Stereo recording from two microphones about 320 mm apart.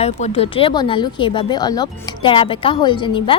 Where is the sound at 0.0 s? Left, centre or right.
Centre.